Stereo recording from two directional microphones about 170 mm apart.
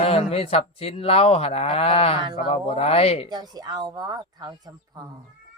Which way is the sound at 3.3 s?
25° right (ahead or behind).